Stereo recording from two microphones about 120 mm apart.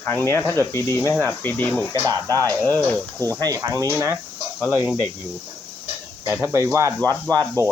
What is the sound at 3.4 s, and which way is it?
Speech, 30° right (ahead or behind).